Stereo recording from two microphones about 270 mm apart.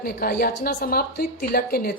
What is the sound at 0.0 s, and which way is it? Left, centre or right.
A woman's voice, left.